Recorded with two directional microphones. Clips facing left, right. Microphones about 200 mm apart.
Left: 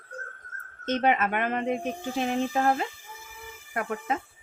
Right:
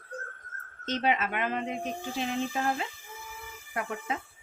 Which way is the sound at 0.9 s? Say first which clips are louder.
Left 4 dB; 55° left (ahead or behind).